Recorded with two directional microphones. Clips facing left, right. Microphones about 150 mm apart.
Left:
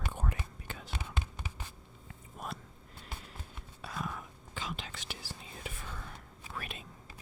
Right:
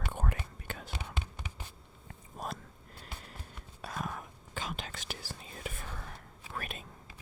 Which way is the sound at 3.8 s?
45° right (ahead or behind).